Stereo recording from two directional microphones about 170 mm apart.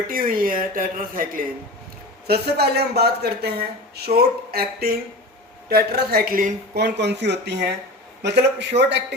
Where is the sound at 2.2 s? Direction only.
70° right (ahead or behind).